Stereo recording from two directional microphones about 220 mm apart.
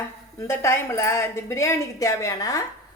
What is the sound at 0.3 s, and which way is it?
Speech, 15° left (ahead or behind).